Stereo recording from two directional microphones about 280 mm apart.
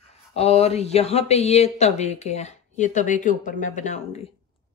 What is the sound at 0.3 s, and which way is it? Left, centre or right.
Speech, left.